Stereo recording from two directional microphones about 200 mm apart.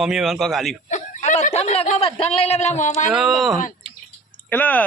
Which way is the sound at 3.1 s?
Centre (ahead or behind).